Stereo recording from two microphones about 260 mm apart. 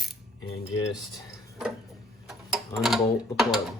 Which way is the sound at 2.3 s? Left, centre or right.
Centre.